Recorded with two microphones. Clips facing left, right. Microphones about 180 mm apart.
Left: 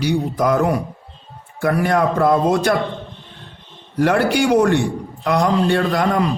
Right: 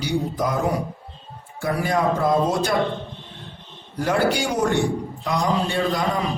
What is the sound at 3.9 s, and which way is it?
A man's voice, 65° left (ahead or behind).